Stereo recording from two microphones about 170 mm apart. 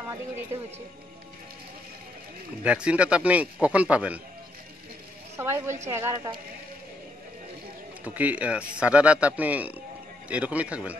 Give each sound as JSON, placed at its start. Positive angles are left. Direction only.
{"t": 2.6, "sound": "speech", "side_deg": -5}
{"t": 5.4, "sound": "speech", "side_deg": -15}
{"t": 8.0, "sound": "speech", "side_deg": -10}